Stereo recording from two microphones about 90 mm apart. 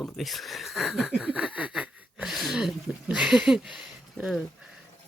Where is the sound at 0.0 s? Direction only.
Centre (ahead or behind).